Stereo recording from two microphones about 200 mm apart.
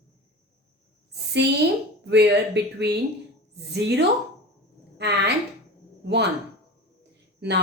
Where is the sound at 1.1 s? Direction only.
55° right (ahead or behind).